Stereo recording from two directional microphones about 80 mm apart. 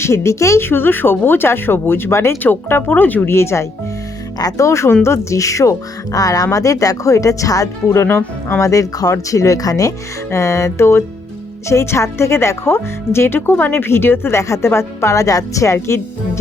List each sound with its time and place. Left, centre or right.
0.0 s speech: left
3.3 s speech: left
4.4 s speech: left